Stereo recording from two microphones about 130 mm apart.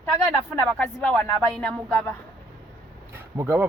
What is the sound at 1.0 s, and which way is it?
A man's voice, 10° left (ahead or behind).